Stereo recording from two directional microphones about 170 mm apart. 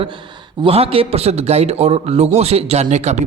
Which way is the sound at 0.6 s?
35° right (ahead or behind).